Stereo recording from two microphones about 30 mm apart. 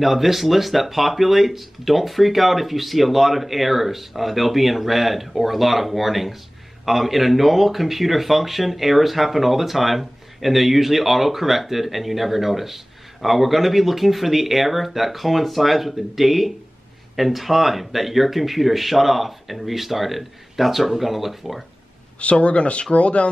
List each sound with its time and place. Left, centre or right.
0.0 s speech: centre
22.2 s speech: left